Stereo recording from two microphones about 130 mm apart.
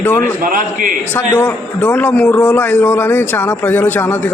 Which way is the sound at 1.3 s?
15° left (ahead or behind).